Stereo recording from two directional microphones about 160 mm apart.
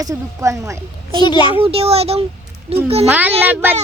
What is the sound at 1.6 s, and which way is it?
Speech, 40° right (ahead or behind).